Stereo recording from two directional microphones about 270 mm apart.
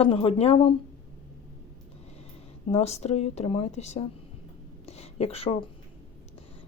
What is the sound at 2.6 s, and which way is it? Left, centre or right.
Speech, left.